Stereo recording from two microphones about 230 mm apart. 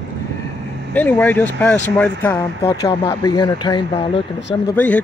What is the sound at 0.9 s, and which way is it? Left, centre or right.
Speech, centre.